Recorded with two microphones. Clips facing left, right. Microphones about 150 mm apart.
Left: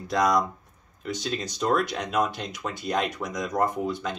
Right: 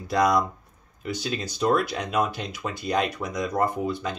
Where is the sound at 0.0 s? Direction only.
Centre (ahead or behind).